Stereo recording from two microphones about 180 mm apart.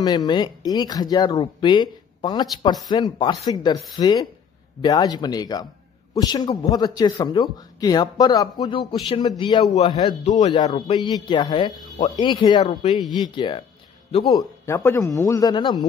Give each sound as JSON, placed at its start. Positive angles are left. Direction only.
{"t": 0.0, "sound": "a man's voice", "side_deg": 25}
{"t": 14.3, "sound": "a man's voice", "side_deg": 15}